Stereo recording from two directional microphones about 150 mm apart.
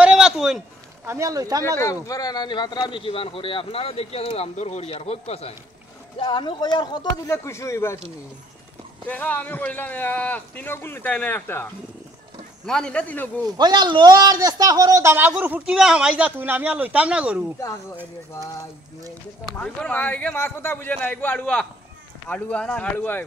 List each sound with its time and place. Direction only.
0.0 s a sound: 5° right (ahead or behind)
1.0 s speech: 20° right (ahead or behind)
1.8 s speech: 20° left (ahead or behind); by 5.5 s 45° left (ahead or behind)
6.1 s speech: 30° left (ahead or behind)
7.4 s speech: 20° left (ahead or behind)
9.0 s speech: 10° left (ahead or behind)
13.6 s a man's voice: 30° right (ahead or behind); by 17.4 s 10° right (ahead or behind)
19.6 s speech: 10° left (ahead or behind)